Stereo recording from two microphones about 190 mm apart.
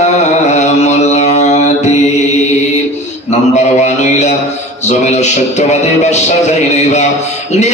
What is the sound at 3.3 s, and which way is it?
A man's voice, 35° left (ahead or behind).